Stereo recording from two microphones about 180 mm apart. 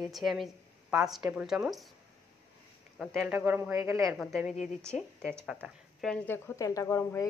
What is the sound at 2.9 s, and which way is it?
Speech, 5° right (ahead or behind).